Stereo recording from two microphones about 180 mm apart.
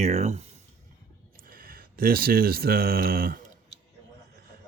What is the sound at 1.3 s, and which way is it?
Speech, 50° right (ahead or behind).